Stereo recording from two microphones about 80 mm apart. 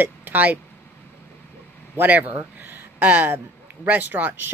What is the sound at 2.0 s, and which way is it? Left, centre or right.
Speech, right.